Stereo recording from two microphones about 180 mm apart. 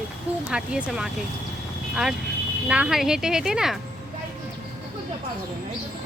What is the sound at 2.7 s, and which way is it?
Speech, 5° right (ahead or behind).